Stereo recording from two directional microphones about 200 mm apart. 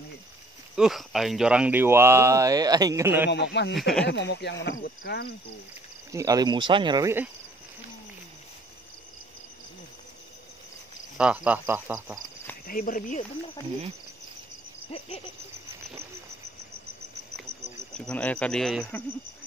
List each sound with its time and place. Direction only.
0.7 s speech: centre (ahead or behind)
3.3 s speech: 60° left (ahead or behind)
3.7 s speech: centre (ahead or behind)
4.0 s speech: 60° left (ahead or behind)
6.1 s speech: 20° right (ahead or behind)
11.1 s speech: 5° right (ahead or behind)
12.6 s speech: 45° left (ahead or behind)
14.9 s cricket: 30° left (ahead or behind)
17.9 s speech: 5° left (ahead or behind)